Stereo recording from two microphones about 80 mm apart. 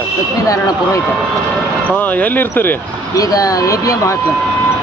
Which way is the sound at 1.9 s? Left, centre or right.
Left.